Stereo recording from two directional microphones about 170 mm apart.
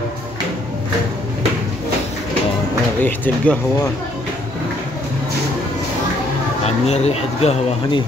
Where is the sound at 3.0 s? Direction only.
10° left (ahead or behind).